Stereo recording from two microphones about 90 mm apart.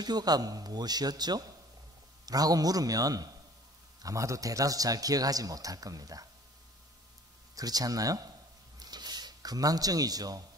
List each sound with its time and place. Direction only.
0.0 s a man's voice: 50° right (ahead or behind)
7.5 s a man's voice: 45° right (ahead or behind)
8.7 s a sound: 50° right (ahead or behind)